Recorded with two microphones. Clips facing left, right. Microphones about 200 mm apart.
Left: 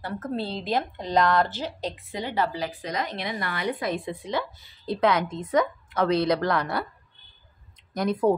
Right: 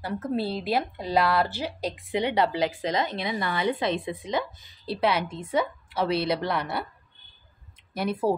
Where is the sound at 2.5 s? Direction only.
90° right.